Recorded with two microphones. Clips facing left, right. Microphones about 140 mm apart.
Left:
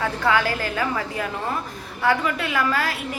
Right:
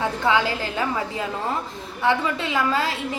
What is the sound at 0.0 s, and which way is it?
A woman's voice, 20° right (ahead or behind).